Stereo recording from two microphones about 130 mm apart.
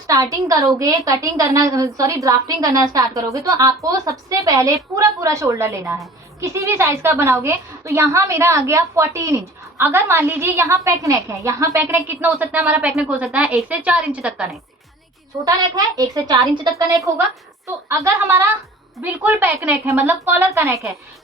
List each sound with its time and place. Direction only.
0.1 s a woman's voice: 25° right (ahead or behind)
12.9 s a woman's voice: 5° right (ahead or behind)
15.4 s a woman's voice: 30° right (ahead or behind)